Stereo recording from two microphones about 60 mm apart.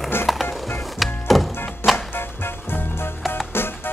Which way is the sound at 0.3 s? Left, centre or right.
Centre.